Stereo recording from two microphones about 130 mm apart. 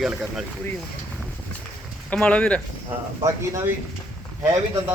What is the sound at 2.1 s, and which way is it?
Speech, 10° left (ahead or behind).